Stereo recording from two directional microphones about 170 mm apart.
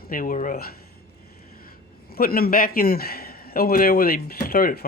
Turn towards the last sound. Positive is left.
turn(degrees=60)  # may be behind; listen again after turning